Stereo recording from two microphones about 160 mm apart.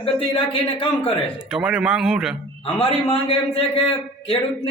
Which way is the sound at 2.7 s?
35° left (ahead or behind).